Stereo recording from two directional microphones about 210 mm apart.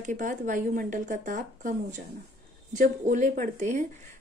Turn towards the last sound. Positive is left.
turn(degrees=-35)  # may be behind; listen again after turning